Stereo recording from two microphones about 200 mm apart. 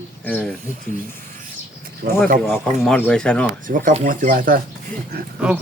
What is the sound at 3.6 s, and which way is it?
Speech, 40° right (ahead or behind).